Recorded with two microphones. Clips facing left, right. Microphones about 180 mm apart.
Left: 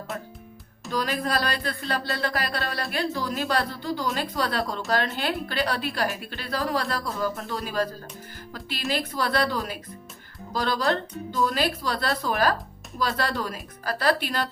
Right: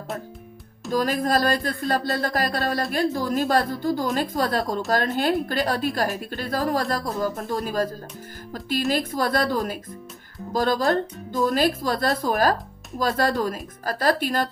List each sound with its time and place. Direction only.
0.9 s speech: 45° right (ahead or behind)
8.9 s speech: 45° right (ahead or behind)